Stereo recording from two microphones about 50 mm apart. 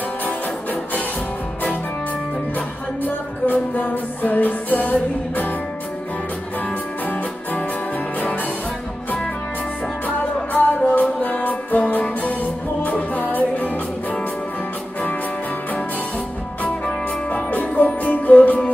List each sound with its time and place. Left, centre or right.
3.0 s music: left
10.0 s music: left
17.3 s music: left